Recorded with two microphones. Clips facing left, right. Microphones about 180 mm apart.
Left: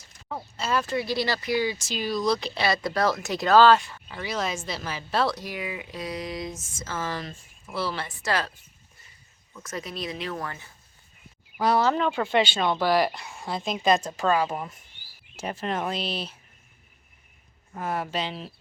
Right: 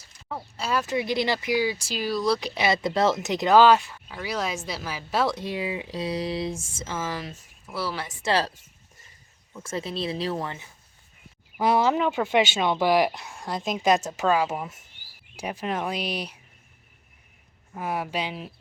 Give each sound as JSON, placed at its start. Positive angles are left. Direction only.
{"t": 0.3, "sound": "speech", "side_deg": -5}
{"t": 0.9, "sound": "speech", "side_deg": -20}
{"t": 2.6, "sound": "speech", "side_deg": -20}
{"t": 5.3, "sound": "speech", "side_deg": -25}
{"t": 6.8, "sound": "speech", "side_deg": -15}
{"t": 8.2, "sound": "speech", "side_deg": -30}
{"t": 11.6, "sound": "speech", "side_deg": -15}
{"t": 13.1, "sound": "speech", "side_deg": 0}
{"t": 13.8, "sound": "speech", "side_deg": -10}
{"t": 17.7, "sound": "speech", "side_deg": -10}